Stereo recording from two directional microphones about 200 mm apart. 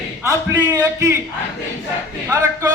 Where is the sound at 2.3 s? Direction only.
15° right (ahead or behind).